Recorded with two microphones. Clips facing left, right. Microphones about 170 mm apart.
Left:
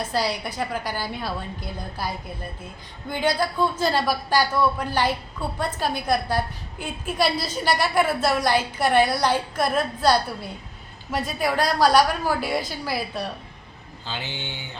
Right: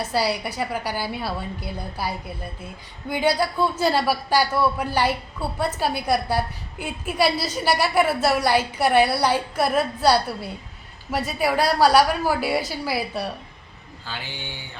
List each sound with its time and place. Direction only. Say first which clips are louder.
0.0 s a man's voice: right 2 dB; 10° right (ahead or behind)
14.1 s speech: left 2 dB; 20° left (ahead or behind)